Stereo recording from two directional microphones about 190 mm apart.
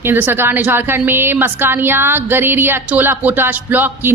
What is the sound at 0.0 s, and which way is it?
A woman's voice, 10° right (ahead or behind).